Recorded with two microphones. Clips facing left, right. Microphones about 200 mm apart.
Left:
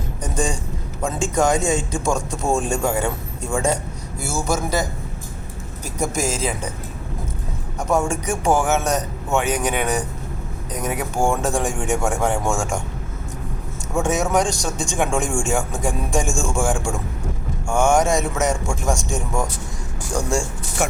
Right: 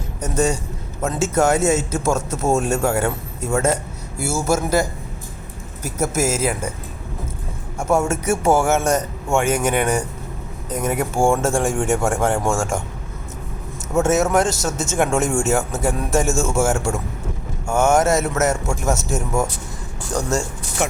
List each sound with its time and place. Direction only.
0.2 s a sound: 5° right (ahead or behind)
1.0 s speech: 5° right (ahead or behind)
7.8 s speech: 10° right (ahead or behind)
13.9 s speech: 5° right (ahead or behind)